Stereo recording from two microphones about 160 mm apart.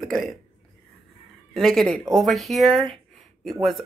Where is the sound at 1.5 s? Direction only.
Centre (ahead or behind).